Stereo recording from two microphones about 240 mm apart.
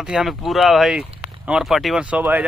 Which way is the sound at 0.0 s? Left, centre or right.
Centre.